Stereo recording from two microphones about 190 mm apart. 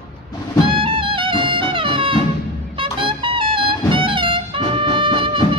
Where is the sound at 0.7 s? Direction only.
25° right (ahead or behind).